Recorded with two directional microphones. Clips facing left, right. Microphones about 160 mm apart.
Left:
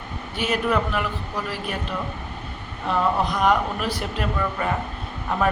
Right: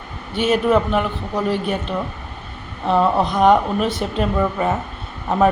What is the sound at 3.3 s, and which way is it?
Speech, 25° right (ahead or behind).